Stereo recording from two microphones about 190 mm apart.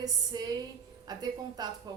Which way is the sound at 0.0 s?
20° right (ahead or behind).